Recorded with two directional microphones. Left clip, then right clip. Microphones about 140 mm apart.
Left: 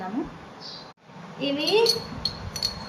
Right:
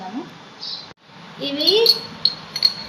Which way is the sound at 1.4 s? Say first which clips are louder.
Right 5 dB; 20° right (ahead or behind).